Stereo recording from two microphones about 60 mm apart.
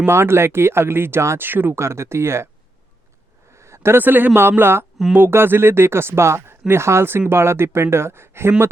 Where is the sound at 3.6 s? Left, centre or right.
Right.